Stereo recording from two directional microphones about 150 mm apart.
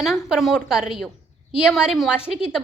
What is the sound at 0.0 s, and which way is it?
A woman's voice, 5° right (ahead or behind).